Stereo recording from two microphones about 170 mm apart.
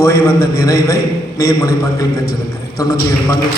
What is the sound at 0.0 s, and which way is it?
A man's voice, 20° left (ahead or behind).